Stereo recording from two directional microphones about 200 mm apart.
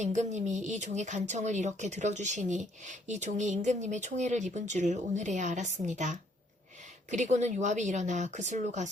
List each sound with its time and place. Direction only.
0.0 s a woman's voice: 35° right (ahead or behind)